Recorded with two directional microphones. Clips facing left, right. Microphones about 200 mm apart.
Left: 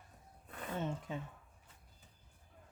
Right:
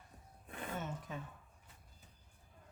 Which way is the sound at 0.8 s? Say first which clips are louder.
Left 9 dB; 25° left (ahead or behind).